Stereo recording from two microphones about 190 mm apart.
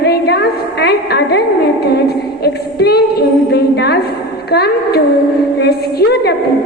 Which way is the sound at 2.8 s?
55° left (ahead or behind).